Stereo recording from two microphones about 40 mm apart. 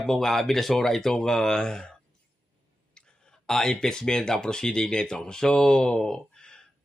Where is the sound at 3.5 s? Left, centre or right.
Centre.